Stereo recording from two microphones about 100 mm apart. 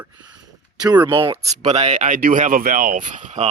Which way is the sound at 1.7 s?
90° right.